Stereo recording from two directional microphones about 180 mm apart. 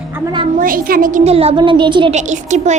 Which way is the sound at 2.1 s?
40° right (ahead or behind).